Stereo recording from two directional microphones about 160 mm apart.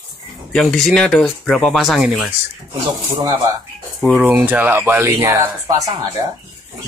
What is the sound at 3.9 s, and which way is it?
Speech, 5° right (ahead or behind).